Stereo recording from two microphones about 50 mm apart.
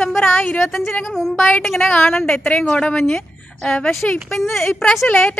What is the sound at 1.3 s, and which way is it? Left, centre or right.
Speech, left.